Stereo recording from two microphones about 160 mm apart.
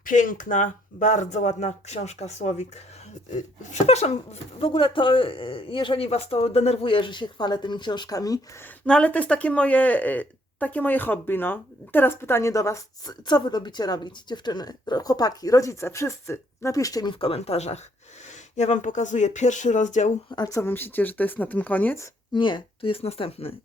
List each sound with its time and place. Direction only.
0.0 s speech: 55° left (ahead or behind)
3.7 s speech: 40° left (ahead or behind); by 8.4 s 20° left (ahead or behind)
8.9 s a woman's voice: 10° left (ahead or behind); by 20.1 s 50° left (ahead or behind)
20.3 s speech: 20° left (ahead or behind)
22.4 s speech: 30° left (ahead or behind)